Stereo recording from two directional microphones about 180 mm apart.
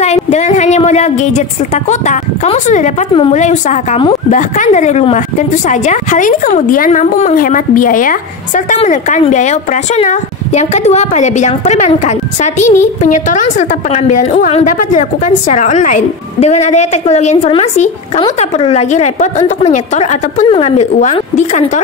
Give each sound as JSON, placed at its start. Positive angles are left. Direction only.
{"t": 0.0, "sound": "a woman's voice", "side_deg": 40}